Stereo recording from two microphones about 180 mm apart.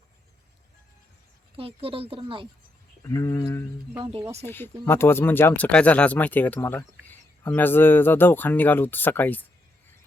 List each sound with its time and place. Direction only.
1.5 s speech: 30° right (ahead or behind)
3.0 s speech: 15° left (ahead or behind)